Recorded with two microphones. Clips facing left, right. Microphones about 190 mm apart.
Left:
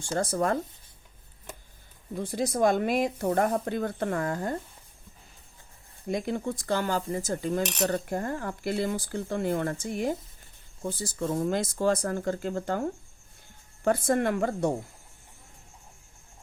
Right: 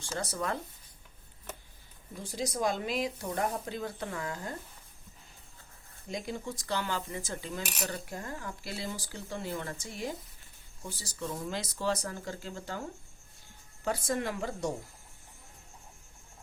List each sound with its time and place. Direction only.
0.0 s speech: 50° left (ahead or behind)
2.2 s speech: 60° left (ahead or behind)
6.1 s speech: 55° left (ahead or behind)
13.8 s speech: 55° left (ahead or behind)